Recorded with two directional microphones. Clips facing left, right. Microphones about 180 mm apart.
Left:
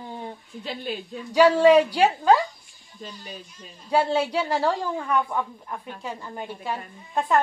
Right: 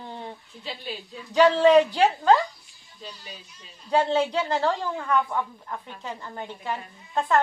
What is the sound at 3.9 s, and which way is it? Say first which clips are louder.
Speech: even; 10° left (ahead or behind).